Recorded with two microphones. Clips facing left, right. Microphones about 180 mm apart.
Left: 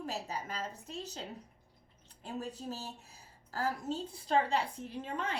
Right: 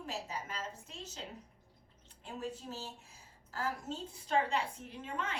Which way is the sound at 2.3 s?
35° left (ahead or behind).